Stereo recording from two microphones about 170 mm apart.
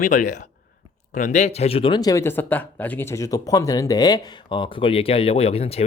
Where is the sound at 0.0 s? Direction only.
50° left (ahead or behind).